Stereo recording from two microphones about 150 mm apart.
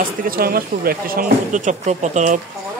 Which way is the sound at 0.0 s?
75° right (ahead or behind).